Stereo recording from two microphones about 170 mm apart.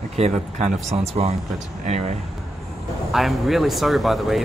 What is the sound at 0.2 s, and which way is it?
Speech, 35° right (ahead or behind).